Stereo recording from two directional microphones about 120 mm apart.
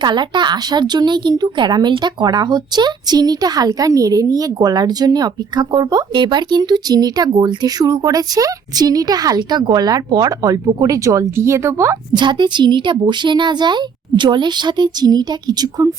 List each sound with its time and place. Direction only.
0.0 s a woman's voice: 40° right (ahead or behind)
12.1 s a woman's voice: 40° right (ahead or behind)